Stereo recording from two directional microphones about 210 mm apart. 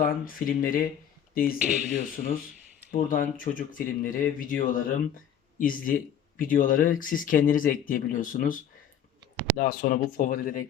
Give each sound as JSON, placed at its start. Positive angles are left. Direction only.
{"t": 0.0, "sound": "speech", "side_deg": 40}
{"t": 9.6, "sound": "speech", "side_deg": 45}